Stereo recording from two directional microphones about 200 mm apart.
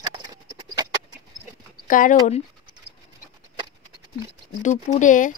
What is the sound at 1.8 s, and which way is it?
Speech, 40° left (ahead or behind).